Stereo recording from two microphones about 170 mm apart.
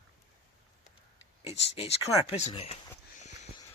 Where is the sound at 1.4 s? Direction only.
40° left (ahead or behind).